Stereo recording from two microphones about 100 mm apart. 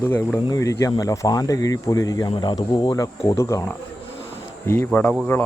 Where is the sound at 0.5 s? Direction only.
35° left (ahead or behind).